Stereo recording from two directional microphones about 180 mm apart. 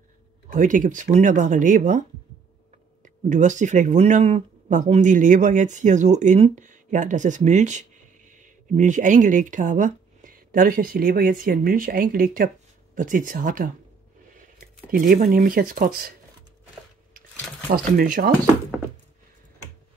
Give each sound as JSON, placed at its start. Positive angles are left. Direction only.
{"t": 0.5, "sound": "speech", "side_deg": -45}
{"t": 3.3, "sound": "speech", "side_deg": -45}
{"t": 17.6, "sound": "speech", "side_deg": -55}